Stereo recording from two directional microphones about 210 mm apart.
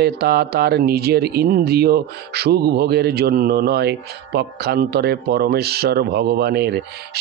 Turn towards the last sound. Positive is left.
turn(degrees=-50)  # may be behind; listen again after turning